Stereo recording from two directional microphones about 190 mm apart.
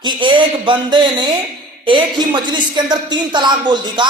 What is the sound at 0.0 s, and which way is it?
Speech, 25° right (ahead or behind).